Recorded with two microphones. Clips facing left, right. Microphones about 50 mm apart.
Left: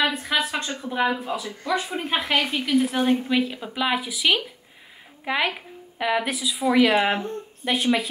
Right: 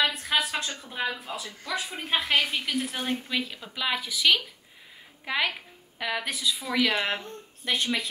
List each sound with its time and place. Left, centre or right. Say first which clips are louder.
0.0 s a sound: left 3 dB; centre
0.7 s a woman's voice: left 8 dB; centre
1.2 s a woman's voice: left 8 dB; centre